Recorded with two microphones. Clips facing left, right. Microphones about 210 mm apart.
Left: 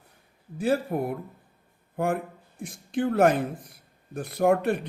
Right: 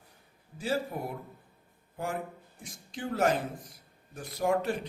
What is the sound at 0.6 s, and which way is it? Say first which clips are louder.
Speech: left 7 dB; 55° left (ahead or behind).